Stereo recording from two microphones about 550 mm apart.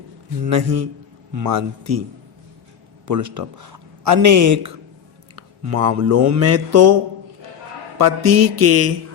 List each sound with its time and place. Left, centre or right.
0.4 s speech: right
3.1 s speech: right